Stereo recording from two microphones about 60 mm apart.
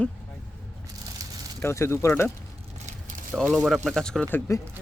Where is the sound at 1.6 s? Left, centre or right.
Left.